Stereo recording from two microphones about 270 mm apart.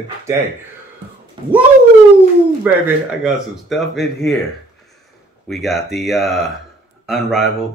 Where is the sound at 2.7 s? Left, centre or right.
Centre.